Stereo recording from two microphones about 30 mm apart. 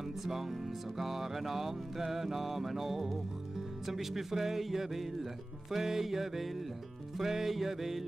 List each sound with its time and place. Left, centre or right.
0.2 s music: centre